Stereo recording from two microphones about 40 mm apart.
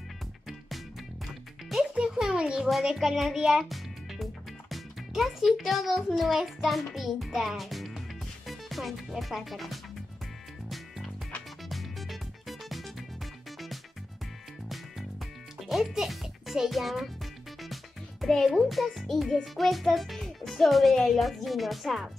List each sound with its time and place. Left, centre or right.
1.2 s music: centre
2.0 s music: centre
3.0 s a child's voice: centre
11.7 s music: centre
15.6 s a child's voice: centre
18.2 s a child's voice: centre
20.2 s music: centre
21.0 s a child's voice: centre